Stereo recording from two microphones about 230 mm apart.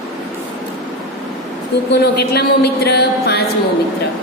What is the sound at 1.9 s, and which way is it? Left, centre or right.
A woman's voice, left.